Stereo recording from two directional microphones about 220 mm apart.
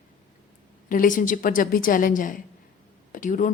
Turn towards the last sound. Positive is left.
turn(degrees=35)  # may be behind; listen again after turning